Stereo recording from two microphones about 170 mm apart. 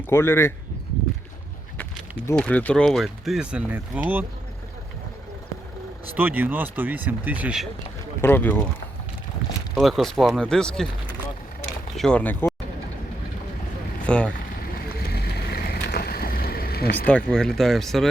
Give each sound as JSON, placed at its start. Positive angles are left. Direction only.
{"t": 0.1, "sound": "speech", "side_deg": 15}
{"t": 1.8, "sound": "speech", "side_deg": 5}
{"t": 6.1, "sound": "speech", "side_deg": -10}
{"t": 8.2, "sound": "speech", "side_deg": 10}
{"t": 9.7, "sound": "speech", "side_deg": 0}
{"t": 11.9, "sound": "speech", "side_deg": 5}
{"t": 14.1, "sound": "speech", "side_deg": 5}
{"t": 15.1, "sound": "vehicle", "side_deg": 70}
{"t": 17.1, "sound": "speech", "side_deg": 5}